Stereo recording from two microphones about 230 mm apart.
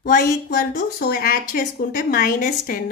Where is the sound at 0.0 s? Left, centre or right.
Left.